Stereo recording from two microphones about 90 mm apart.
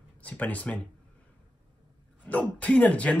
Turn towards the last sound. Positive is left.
turn(degrees=15)  # may be behind; listen again after turning